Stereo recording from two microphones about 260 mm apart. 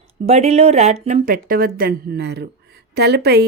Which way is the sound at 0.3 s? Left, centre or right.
Right.